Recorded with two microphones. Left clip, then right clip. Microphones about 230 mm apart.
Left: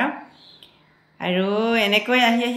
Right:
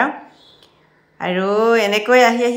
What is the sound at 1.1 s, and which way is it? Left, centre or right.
A woman's voice, centre.